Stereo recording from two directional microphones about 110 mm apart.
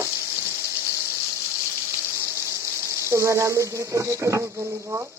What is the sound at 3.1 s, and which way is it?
Speech, 25° right (ahead or behind).